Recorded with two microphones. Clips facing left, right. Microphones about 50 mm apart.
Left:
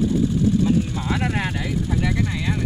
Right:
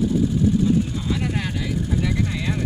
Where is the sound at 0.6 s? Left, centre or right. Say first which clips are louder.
Even; left.